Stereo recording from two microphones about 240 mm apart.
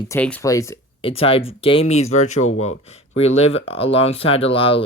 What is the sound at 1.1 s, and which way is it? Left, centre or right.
Speech, left.